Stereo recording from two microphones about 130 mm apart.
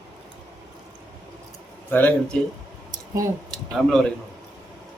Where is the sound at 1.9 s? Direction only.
15° left (ahead or behind).